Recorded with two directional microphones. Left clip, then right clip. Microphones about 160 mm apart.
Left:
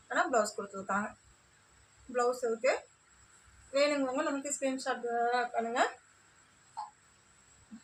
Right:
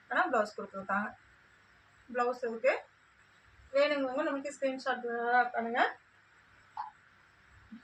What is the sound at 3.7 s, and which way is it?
A woman's voice, 10° left (ahead or behind).